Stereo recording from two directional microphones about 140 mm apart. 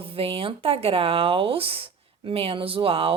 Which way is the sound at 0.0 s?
40° right (ahead or behind).